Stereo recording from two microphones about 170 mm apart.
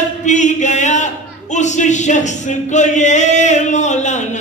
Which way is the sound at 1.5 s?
45° left (ahead or behind).